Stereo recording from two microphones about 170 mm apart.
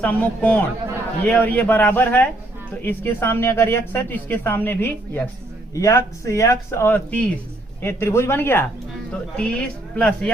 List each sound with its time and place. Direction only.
0.0 s speech: 10° left (ahead or behind)